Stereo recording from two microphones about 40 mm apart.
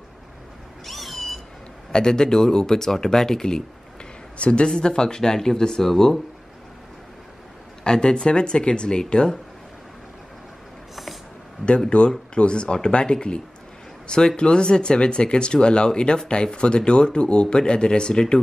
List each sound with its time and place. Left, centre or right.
0.8 s cat: centre
1.9 s speech: centre
4.4 s speech: left; by 6.2 s centre
7.8 s speech: left
11.9 s speech: left